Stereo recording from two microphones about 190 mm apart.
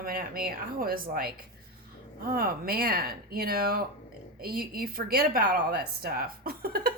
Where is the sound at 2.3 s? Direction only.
50° right (ahead or behind).